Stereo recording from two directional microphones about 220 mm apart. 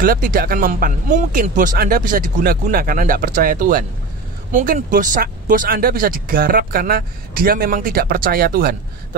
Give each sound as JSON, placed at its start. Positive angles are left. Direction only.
{"t": 0.0, "sound": "speech", "side_deg": -40}